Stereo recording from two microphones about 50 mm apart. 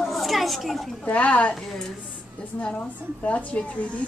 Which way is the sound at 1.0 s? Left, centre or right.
Left.